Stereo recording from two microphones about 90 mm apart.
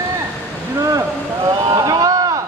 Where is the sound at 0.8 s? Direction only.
40° right (ahead or behind).